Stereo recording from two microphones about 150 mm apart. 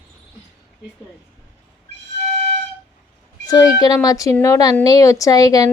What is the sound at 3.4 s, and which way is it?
A woman's voice, 25° left (ahead or behind).